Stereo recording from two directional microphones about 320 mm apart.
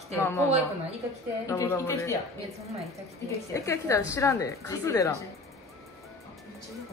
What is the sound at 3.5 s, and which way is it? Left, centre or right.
A woman's voice, centre.